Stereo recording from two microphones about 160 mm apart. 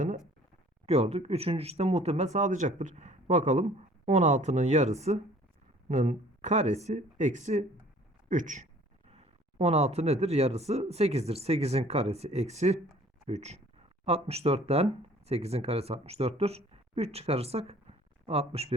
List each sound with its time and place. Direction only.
0.9 s speech: 40° right (ahead or behind)
9.0 s speech: 40° right (ahead or behind)